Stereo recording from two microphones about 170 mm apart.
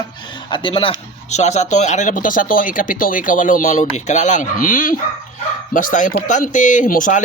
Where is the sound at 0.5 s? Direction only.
30° left (ahead or behind).